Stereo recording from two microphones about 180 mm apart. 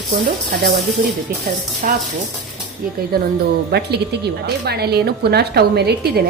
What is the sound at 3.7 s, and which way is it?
A woman's voice, 60° right (ahead or behind).